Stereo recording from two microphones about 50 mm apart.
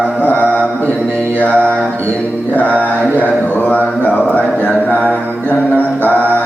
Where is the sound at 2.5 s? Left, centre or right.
Left.